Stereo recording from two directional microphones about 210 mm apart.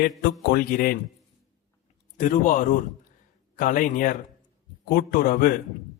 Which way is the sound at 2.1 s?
40° left (ahead or behind).